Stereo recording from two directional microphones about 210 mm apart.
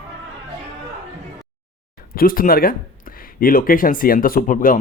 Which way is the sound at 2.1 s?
40° left (ahead or behind).